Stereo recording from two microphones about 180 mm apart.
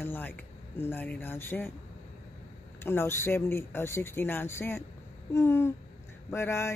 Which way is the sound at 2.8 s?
15° left (ahead or behind).